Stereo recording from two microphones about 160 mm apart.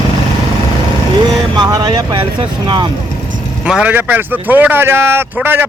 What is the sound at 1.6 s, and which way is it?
Speech, 25° right (ahead or behind).